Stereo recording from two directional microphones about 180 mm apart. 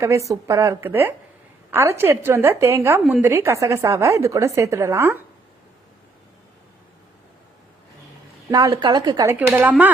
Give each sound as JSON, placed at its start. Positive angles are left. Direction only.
{"t": 0.0, "sound": "a woman's voice", "side_deg": -15}
{"t": 8.4, "sound": "a woman's voice", "side_deg": -20}